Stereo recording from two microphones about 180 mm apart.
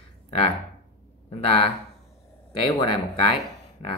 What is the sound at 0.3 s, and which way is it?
Speech, 30° left (ahead or behind).